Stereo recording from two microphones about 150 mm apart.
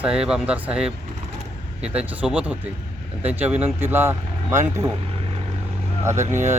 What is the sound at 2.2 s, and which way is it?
Speech, 10° right (ahead or behind).